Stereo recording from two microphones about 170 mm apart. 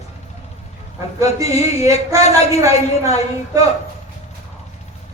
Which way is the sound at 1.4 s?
40° left (ahead or behind).